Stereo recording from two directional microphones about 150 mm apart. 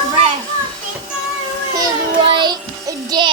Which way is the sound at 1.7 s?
30° right (ahead or behind).